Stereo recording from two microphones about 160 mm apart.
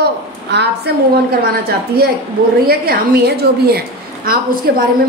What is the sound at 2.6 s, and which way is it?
A woman's voice, 70° right (ahead or behind).